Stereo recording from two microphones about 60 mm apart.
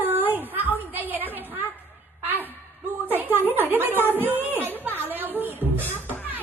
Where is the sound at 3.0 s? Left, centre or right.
Right.